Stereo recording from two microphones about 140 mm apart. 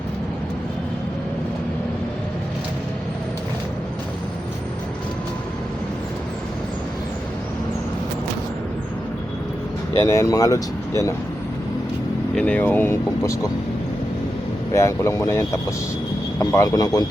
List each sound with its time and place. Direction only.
10.1 s speech: 20° left (ahead or behind)
12.4 s speech: 10° left (ahead or behind)
14.7 s speech: 20° left (ahead or behind)